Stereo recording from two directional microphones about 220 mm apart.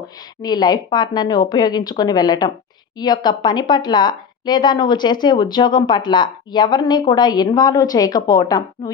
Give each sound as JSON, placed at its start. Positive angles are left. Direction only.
{"t": 0.4, "sound": "a woman's voice", "side_deg": 20}